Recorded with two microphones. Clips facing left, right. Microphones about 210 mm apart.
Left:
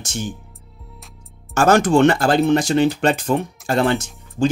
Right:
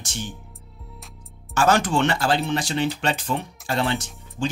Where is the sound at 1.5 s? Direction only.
50° left (ahead or behind).